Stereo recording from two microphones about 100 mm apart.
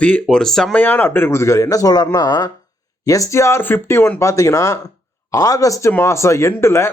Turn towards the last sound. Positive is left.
turn(degrees=25)  # may be behind; listen again after turning